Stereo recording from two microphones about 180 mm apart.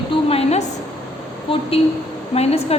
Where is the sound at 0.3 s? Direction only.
35° left (ahead or behind).